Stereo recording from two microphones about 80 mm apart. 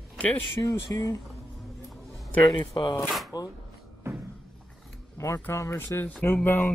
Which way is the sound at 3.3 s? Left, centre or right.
Left.